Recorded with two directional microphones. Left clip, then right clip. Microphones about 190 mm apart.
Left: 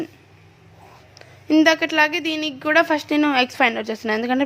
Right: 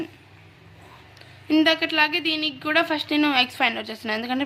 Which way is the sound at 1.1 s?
35° left (ahead or behind).